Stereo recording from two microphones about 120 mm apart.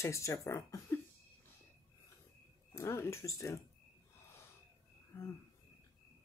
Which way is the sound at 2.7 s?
20° left (ahead or behind).